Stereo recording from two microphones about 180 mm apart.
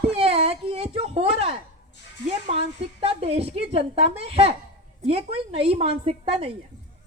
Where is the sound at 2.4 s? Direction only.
35° right (ahead or behind).